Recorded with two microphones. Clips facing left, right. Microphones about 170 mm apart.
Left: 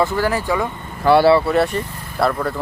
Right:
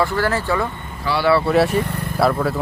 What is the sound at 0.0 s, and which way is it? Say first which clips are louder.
Speech: left 1 dB; 15° left (ahead or behind).